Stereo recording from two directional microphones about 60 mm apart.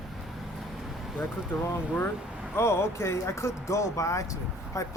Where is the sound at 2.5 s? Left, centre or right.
Left.